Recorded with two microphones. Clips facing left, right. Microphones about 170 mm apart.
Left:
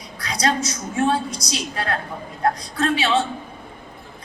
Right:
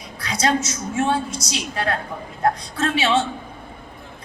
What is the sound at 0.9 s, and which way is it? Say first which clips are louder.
Speech: left 1 dB; 30° right (ahead or behind).